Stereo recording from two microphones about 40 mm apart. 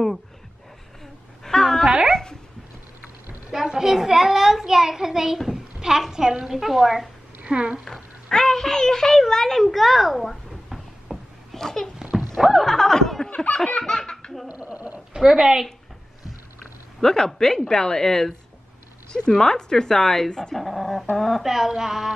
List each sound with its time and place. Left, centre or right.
1.4 s a sound: centre
3.5 s a child's voice: centre
7.4 s speech: right
7.8 s a child's voice: centre
11.5 s a sound: centre
12.2 s a sound: centre
13.3 s laughter: left
13.7 s laughter: centre
14.5 s a sound: right
15.1 s a child's voice: centre
17.0 s speech: centre
19.3 s speech: centre
21.4 s a child's voice: centre